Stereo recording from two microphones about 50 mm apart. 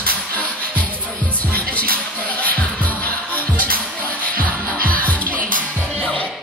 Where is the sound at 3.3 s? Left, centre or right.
Left.